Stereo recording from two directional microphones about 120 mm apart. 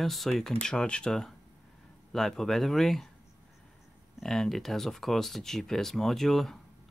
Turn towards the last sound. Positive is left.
turn(degrees=0)  # may be behind; listen again after turning